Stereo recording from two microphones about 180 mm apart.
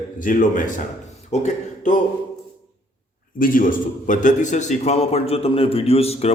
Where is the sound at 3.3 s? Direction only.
50° left (ahead or behind).